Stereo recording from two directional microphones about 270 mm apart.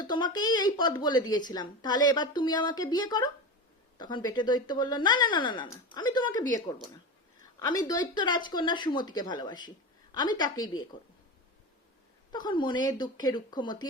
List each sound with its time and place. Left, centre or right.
0.0 s a woman's voice: centre
7.9 s a woman's voice: centre
12.3 s a woman's voice: centre